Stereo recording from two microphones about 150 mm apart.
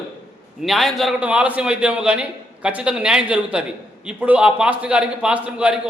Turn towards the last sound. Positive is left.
turn(degrees=-5)  # may be behind; listen again after turning